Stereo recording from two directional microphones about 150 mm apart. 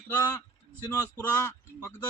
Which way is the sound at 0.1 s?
20° left (ahead or behind).